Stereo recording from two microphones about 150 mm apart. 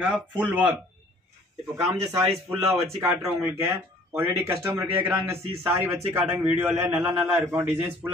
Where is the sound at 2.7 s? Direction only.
20° right (ahead or behind).